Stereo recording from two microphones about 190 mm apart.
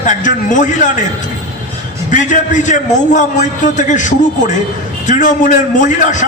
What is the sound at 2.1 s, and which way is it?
A man's voice, 40° left (ahead or behind).